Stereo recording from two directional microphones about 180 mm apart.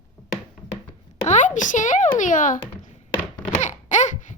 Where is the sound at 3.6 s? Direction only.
40° left (ahead or behind).